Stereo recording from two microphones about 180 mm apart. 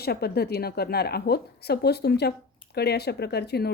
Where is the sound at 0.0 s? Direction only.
60° left (ahead or behind).